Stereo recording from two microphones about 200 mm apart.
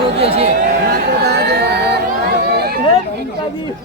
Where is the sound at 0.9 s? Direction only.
55° right (ahead or behind).